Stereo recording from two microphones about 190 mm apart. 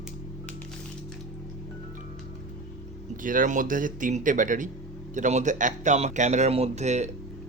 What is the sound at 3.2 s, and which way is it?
Speech, 45° right (ahead or behind).